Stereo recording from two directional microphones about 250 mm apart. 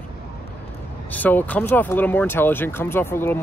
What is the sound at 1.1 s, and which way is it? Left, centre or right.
Speech, centre.